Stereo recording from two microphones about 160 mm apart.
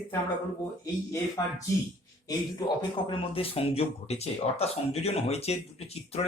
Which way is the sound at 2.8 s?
35° left (ahead or behind).